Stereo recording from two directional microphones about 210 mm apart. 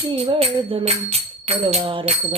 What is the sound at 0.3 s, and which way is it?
Music, 25° right (ahead or behind).